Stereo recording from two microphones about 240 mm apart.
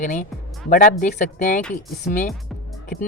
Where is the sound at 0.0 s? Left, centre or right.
Left.